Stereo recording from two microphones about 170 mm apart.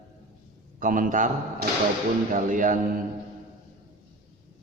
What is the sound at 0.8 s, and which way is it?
A man's voice, 55° right (ahead or behind).